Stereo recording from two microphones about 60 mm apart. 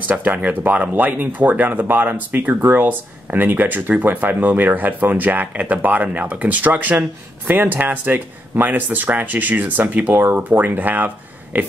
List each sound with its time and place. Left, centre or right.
0.1 s speech: right